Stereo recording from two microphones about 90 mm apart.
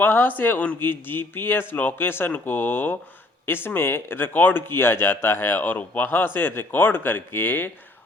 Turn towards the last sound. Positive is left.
turn(degrees=20)  # may be behind; listen again after turning